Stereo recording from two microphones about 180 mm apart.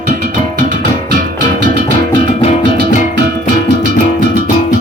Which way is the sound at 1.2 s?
50° right (ahead or behind).